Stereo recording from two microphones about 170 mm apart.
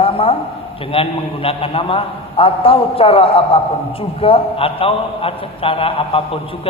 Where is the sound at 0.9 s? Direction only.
35° left (ahead or behind).